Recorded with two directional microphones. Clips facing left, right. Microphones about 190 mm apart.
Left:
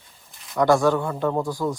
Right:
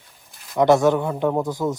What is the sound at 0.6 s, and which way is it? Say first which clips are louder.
A man's voice: right 2 dB; 20° right (ahead or behind).